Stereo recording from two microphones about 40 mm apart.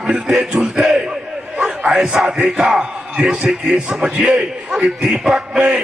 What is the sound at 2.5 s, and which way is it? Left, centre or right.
A man's voice, right.